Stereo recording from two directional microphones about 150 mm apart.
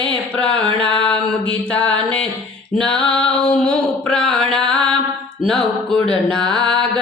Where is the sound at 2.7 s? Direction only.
5° left (ahead or behind).